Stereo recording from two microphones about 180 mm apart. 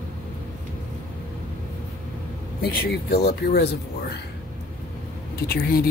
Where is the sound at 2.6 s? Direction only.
55° left (ahead or behind).